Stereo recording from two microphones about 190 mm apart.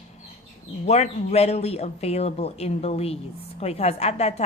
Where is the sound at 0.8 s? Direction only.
35° left (ahead or behind).